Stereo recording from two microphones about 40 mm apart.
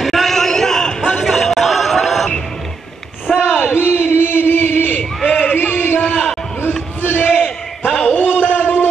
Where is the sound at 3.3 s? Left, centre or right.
Centre.